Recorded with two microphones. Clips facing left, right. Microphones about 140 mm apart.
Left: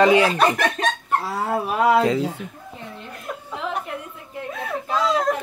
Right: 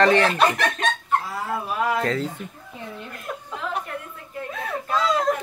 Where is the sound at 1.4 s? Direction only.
75° left (ahead or behind).